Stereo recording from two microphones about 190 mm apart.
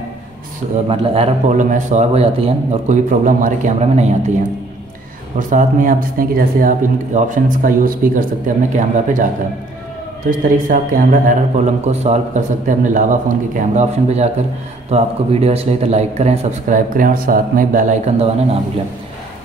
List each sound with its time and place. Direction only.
0.8 s a man's voice: 30° right (ahead or behind)
5.5 s a man's voice: 45° right (ahead or behind)
10.7 s a man's voice: 45° right (ahead or behind)